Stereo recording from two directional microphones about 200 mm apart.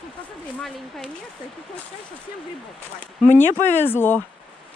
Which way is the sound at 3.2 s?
10° left (ahead or behind).